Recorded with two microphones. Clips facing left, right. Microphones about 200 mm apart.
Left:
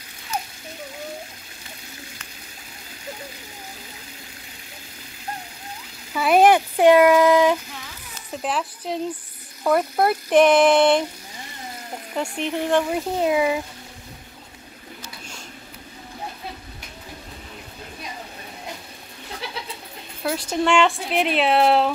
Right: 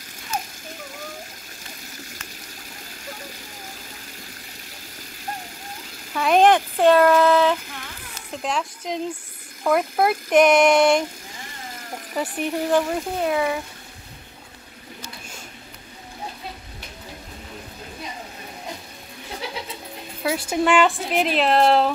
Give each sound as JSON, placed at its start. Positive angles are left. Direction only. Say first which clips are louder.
{"t": 6.1, "sound": "speech", "louder": "left 1 dB", "side_deg": 5}
{"t": 7.8, "sound": "a sound", "louder": "right 1 dB", "side_deg": 5}
{"t": 9.6, "sound": "a woman's voice", "louder": "even", "side_deg": 0}
{"t": 12.1, "sound": "a woman's voice", "louder": "right 1 dB", "side_deg": -5}
{"t": 13.2, "sound": "speech", "louder": "left 3 dB", "side_deg": 15}
{"t": 20.2, "sound": "a woman's voice", "louder": "right 1 dB", "side_deg": -5}